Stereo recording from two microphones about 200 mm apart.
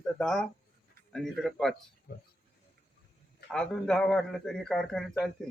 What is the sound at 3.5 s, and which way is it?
Speech, 5° left (ahead or behind).